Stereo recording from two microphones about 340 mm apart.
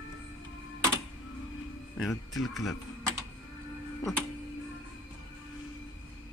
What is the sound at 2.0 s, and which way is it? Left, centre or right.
Speech, centre.